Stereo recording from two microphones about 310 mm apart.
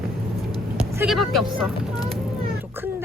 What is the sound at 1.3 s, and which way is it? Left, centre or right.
Speech, centre.